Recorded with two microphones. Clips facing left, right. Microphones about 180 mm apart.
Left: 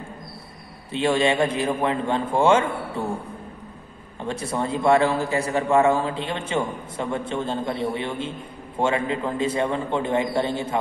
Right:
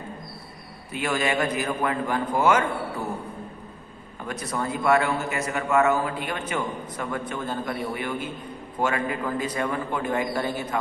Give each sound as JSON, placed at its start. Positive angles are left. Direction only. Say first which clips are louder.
{"t": 0.9, "sound": "a man's voice", "louder": "left 5 dB", "side_deg": 25}
{"t": 4.2, "sound": "a man's voice", "louder": "left 3 dB", "side_deg": 30}